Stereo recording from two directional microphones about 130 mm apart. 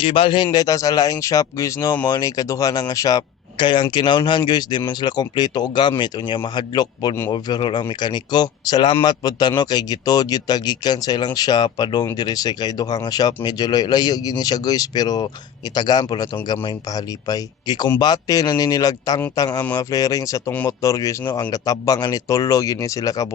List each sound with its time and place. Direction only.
0.0 s speech: 40° left (ahead or behind); by 23.3 s 25° left (ahead or behind)